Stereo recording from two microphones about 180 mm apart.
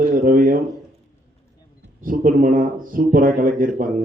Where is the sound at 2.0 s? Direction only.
50° right (ahead or behind).